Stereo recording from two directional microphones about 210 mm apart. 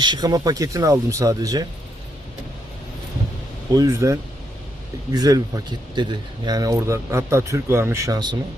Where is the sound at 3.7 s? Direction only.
15° right (ahead or behind).